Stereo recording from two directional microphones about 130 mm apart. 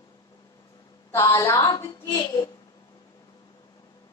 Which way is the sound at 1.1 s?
25° left (ahead or behind).